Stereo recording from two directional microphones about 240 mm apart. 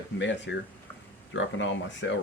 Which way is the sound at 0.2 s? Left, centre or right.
Left.